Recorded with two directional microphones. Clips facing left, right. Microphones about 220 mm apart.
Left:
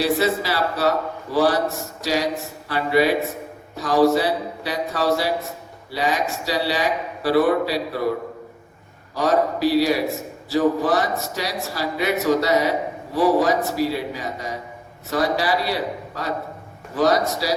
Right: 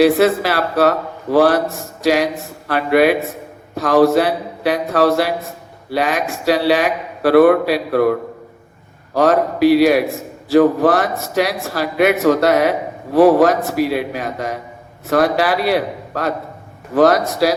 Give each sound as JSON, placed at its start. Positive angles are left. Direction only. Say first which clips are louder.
{"t": 0.0, "sound": "a man's voice", "louder": "right 8 dB", "side_deg": -60}